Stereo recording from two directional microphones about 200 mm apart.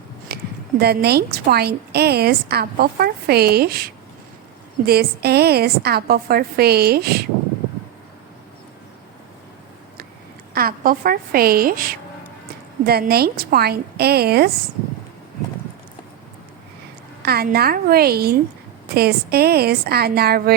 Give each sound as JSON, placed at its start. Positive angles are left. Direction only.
{"t": 0.3, "sound": "a sound", "side_deg": -55}
{"t": 0.8, "sound": "a woman's voice", "side_deg": -50}
{"t": 4.9, "sound": "a woman's voice", "side_deg": -50}
{"t": 10.5, "sound": "a woman's voice", "side_deg": -50}
{"t": 17.2, "sound": "a woman's voice", "side_deg": -50}